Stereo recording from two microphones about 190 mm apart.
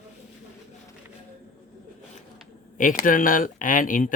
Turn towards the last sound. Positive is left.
turn(degrees=45)  # may be behind; listen again after turning